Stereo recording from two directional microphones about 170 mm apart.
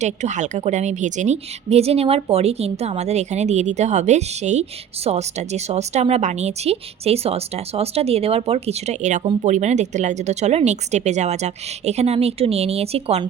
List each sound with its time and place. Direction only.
0.0 s a woman's voice: 45° right (ahead or behind)